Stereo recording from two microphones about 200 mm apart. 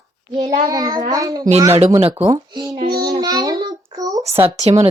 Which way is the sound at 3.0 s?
20° right (ahead or behind).